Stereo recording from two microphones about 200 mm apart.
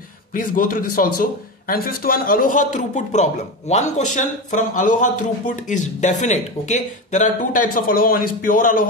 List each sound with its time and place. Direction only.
0.3 s a man's voice: 45° left (ahead or behind)